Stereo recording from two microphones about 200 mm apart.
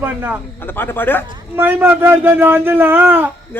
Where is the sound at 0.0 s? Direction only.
10° right (ahead or behind).